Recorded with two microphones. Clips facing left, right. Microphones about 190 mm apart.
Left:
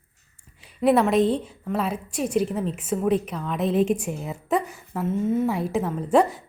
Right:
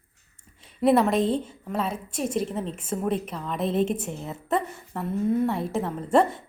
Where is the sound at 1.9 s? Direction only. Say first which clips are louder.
Left 3 dB; 25° right (ahead or behind).